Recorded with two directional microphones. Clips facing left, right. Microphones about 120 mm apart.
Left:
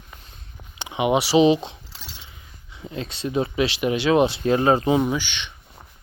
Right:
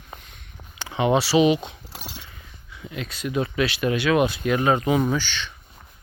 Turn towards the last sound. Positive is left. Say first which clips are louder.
# even
turn(degrees=20)  # may be behind; listen again after turning